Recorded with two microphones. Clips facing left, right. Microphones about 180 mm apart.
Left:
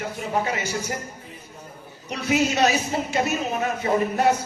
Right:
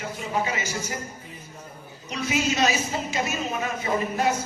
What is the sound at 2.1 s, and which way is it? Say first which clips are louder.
A woman's voice: left 3 dB; 60° left (ahead or behind).